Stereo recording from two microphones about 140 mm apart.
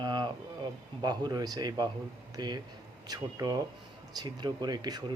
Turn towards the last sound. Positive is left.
turn(degrees=-30)  # may be behind; listen again after turning